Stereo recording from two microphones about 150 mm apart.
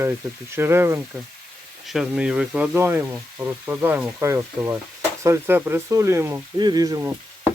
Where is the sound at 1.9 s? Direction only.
5° right (ahead or behind); by 7.1 s 25° right (ahead or behind).